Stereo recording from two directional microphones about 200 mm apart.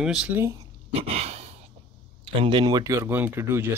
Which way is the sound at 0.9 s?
30° right (ahead or behind).